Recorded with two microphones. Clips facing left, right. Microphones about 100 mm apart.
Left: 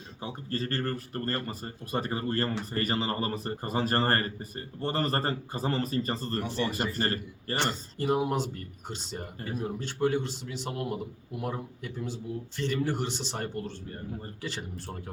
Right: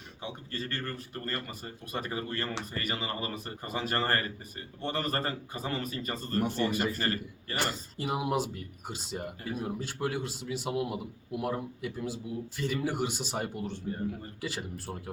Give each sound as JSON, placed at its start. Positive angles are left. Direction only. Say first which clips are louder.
{"t": 0.2, "sound": "speech", "louder": "left 4 dB", "side_deg": 35}
{"t": 7.5, "sound": "speech", "louder": "left 3 dB", "side_deg": -5}